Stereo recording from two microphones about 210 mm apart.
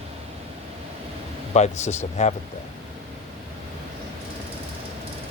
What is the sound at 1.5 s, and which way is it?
Speech, 35° left (ahead or behind).